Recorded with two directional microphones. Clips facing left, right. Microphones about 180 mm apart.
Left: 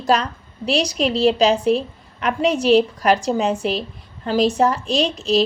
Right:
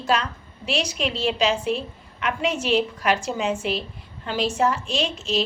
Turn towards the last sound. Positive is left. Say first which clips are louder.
# left 6 dB
turn(degrees=35)  # may be behind; listen again after turning